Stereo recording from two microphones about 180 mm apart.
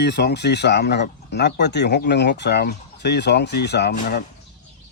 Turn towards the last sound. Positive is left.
turn(degrees=65)  # may be behind; listen again after turning